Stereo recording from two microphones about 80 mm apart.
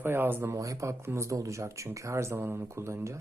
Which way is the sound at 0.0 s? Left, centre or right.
Right.